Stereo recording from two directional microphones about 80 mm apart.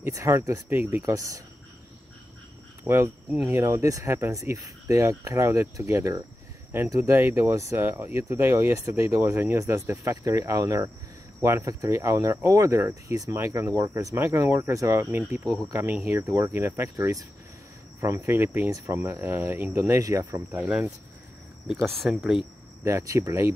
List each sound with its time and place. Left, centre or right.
0.0 s speech: right
2.8 s speech: right
15.4 s speech: centre
15.7 s speech: right
18.0 s speech: right
19.8 s speech: right
21.8 s speech: centre
22.8 s speech: right